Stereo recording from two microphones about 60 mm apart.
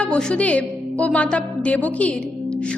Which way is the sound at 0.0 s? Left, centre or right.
Centre.